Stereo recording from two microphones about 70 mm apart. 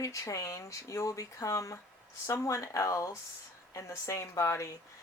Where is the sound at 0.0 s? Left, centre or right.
Left.